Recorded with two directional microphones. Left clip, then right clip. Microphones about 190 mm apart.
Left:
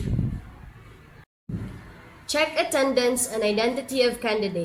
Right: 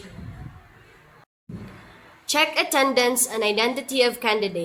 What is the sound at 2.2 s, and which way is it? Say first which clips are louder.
A woman's voice: right 2 dB; 35° right (ahead or behind).